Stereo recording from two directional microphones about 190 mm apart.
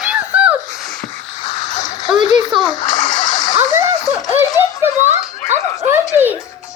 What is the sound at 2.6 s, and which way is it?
Splash, 20° left (ahead or behind).